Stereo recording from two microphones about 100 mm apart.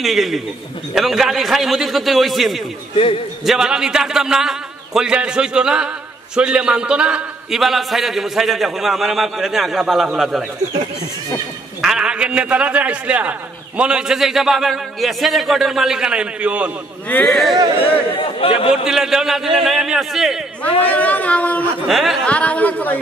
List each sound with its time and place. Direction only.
0.0 s a man's voice: centre (ahead or behind)
11.8 s a man's voice: 10° right (ahead or behind)
17.3 s a man's voice: 5° left (ahead or behind)
18.2 s speech: 65° left (ahead or behind)
18.9 s a man's voice: 5° right (ahead or behind)
20.6 s speech: 15° left (ahead or behind)
21.8 s a man's voice: centre (ahead or behind)
22.2 s speech: 15° left (ahead or behind)